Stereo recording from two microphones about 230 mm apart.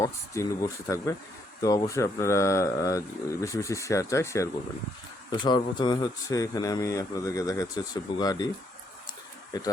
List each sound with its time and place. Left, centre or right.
0.0 s speech: centre
9.5 s speech: centre